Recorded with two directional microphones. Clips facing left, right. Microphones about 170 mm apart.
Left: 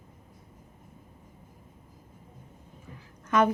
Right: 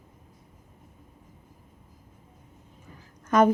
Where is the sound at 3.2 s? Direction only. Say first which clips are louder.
Right 4 dB; 45° right (ahead or behind).